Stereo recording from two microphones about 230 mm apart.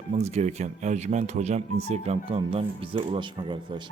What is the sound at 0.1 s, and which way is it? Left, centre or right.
Speech, right.